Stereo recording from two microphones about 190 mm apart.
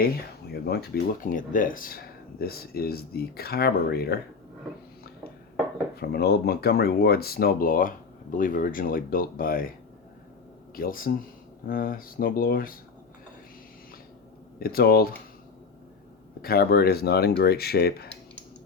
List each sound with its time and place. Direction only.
0.5 s speech: 55° left (ahead or behind)
6.0 s speech: 55° left (ahead or behind)
10.8 s speech: 50° left (ahead or behind)
14.6 s speech: 50° left (ahead or behind)
16.4 s speech: 55° left (ahead or behind)